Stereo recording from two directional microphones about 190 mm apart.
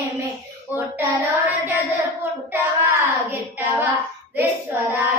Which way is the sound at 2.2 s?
10° right (ahead or behind).